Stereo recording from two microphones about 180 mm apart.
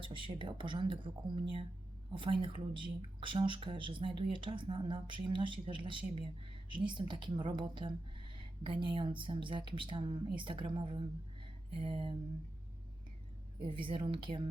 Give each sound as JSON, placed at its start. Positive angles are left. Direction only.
{"t": 0.0, "sound": "speech", "side_deg": -30}
{"t": 13.7, "sound": "speech", "side_deg": -30}